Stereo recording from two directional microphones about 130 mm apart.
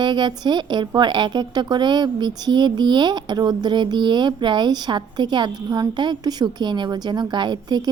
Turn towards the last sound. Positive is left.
turn(degrees=-35)  # may be behind; listen again after turning